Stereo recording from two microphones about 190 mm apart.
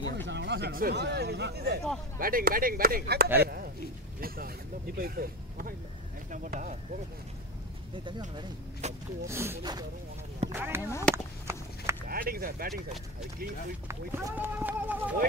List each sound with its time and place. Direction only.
0.3 s speech: 65° right (ahead or behind); by 6.8 s 40° right (ahead or behind)
8.8 s speech: 35° right (ahead or behind)
9.3 s speech: 15° right (ahead or behind)
10.9 s speech: 15° left (ahead or behind)
11.4 s a sound: 15° right (ahead or behind)
12.1 s speech: 50° right (ahead or behind)
13.8 s speech: 15° right (ahead or behind)